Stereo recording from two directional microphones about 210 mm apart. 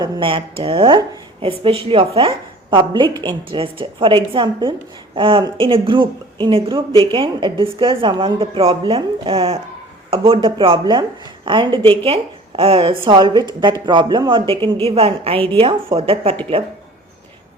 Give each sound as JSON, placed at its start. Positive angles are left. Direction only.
{"t": 0.0, "sound": "speech", "side_deg": -25}